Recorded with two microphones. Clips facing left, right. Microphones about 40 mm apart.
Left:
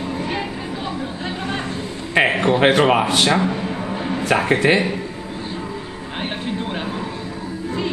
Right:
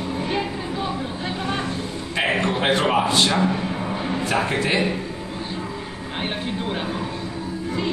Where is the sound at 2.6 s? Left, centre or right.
Left.